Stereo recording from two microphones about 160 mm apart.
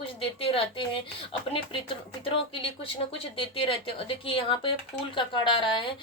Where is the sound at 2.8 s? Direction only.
35° left (ahead or behind).